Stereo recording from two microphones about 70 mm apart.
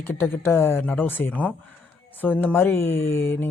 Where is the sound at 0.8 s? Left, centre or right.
Left.